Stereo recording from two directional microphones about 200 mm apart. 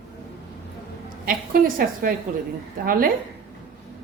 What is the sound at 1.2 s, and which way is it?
A woman's voice, 45° right (ahead or behind).